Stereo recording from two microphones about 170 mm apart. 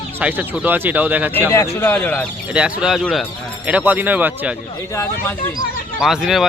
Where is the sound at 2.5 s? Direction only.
5° right (ahead or behind).